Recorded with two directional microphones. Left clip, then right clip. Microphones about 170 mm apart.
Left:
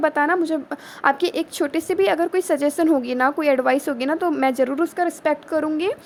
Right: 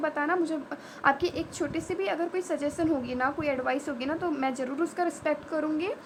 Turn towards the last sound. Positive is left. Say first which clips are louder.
# left 8 dB
turn(degrees=40)  # may be behind; listen again after turning